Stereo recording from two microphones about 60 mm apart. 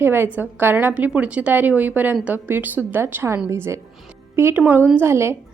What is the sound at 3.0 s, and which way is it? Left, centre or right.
A woman's voice, right.